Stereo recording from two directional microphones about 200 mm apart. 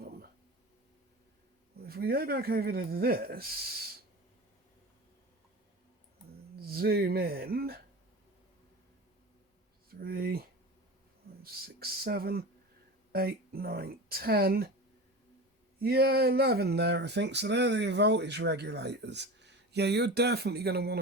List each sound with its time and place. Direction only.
1.8 s speech: 50° right (ahead or behind)
6.6 s speech: 50° right (ahead or behind)
9.9 s speech: 50° right (ahead or behind)
11.4 s speech: 50° right (ahead or behind)
15.8 s a sound: 50° right (ahead or behind)